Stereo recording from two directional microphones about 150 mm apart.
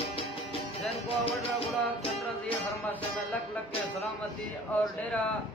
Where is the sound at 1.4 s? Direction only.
40° left (ahead or behind).